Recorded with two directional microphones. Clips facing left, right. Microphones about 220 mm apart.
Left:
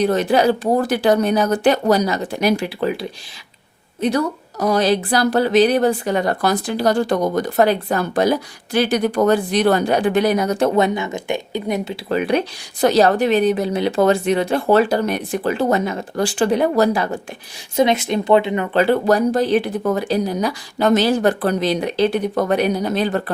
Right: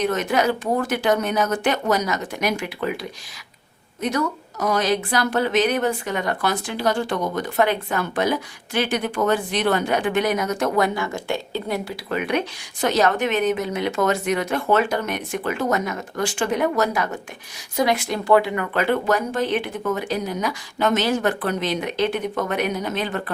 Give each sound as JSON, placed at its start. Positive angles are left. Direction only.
{"t": 0.0, "sound": "a woman's voice", "side_deg": 35}
{"t": 12.0, "sound": "a woman's voice", "side_deg": 35}